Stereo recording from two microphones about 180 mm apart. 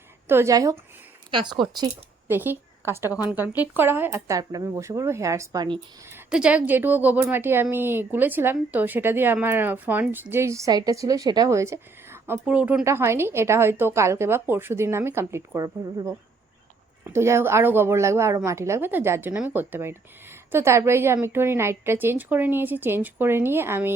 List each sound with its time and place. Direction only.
0.3 s speech: 15° right (ahead or behind)
2.2 s a woman's voice: 10° right (ahead or behind)
6.1 s speech: 10° right (ahead or behind)